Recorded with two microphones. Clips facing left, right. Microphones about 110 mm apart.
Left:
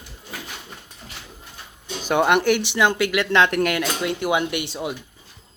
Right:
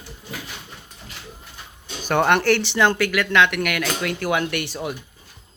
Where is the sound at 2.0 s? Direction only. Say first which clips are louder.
Even; 10° left (ahead or behind).